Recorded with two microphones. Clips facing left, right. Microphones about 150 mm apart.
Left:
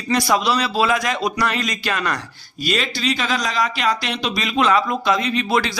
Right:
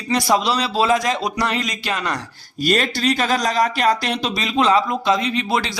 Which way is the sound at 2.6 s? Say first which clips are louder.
Right 4 dB; 45° right (ahead or behind).